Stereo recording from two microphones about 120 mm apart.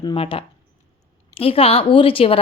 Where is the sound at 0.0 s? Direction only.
45° left (ahead or behind).